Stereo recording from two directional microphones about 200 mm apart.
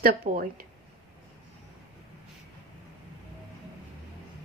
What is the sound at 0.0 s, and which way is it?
Speech, 45° right (ahead or behind).